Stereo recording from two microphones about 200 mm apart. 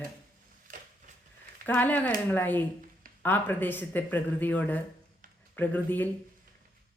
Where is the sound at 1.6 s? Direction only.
10° left (ahead or behind).